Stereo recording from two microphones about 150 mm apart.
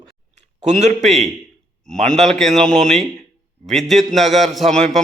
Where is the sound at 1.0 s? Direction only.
Centre (ahead or behind).